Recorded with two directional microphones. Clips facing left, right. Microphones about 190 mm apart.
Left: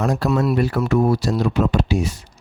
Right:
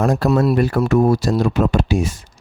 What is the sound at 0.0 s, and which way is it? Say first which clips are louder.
Speech: right 3 dB; 50° right (ahead or behind).